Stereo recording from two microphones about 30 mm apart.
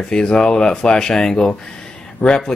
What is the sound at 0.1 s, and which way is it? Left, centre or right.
Speech, left.